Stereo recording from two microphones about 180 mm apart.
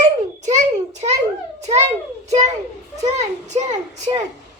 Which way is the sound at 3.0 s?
40° right (ahead or behind).